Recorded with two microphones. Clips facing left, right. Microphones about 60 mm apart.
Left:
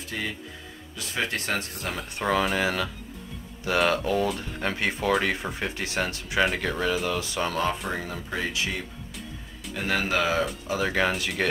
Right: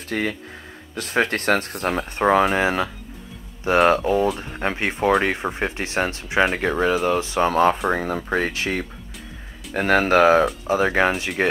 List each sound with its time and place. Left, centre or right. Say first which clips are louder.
0.1 s speech: right 8 dB; right
2.0 s speech: right 7 dB; right
10.7 s speech: right 5 dB; right